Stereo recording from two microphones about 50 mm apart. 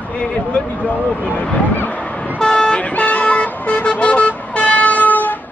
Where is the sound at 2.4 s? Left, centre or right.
Centre; by 5.4 s left.